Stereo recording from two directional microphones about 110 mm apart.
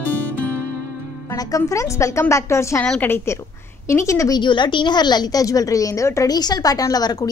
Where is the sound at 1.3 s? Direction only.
30° left (ahead or behind).